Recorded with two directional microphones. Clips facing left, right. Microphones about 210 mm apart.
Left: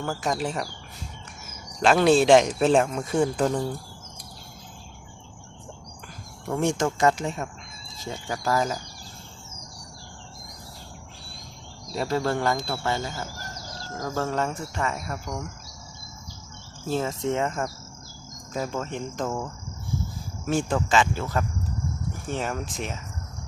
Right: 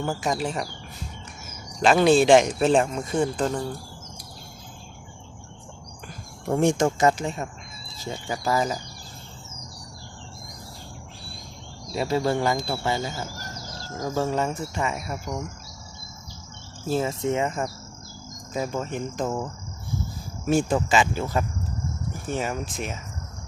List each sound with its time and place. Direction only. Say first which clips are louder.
0.2 s speech: right 1 dB; centre (ahead or behind)
1.8 s speech: right 1 dB; centre (ahead or behind)
6.6 s speech: right 2 dB; 15° right (ahead or behind)
11.9 s speech: right 2 dB; 10° right (ahead or behind)
16.9 s speech: right 2 dB; 5° right (ahead or behind)
20.5 s speech: right 2 dB; 10° right (ahead or behind)